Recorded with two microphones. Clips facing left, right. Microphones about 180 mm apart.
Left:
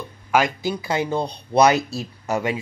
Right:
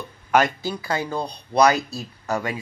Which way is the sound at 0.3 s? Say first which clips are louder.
Even; 15° left (ahead or behind).